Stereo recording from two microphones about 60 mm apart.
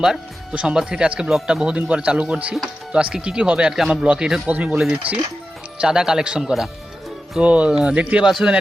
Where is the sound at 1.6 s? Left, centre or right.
Centre.